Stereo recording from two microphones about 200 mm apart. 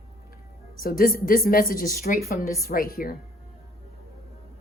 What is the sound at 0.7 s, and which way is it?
A woman's voice, 45° left (ahead or behind).